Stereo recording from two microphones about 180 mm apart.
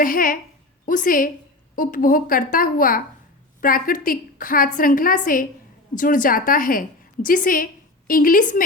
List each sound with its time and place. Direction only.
0.0 s a woman's voice: 50° left (ahead or behind)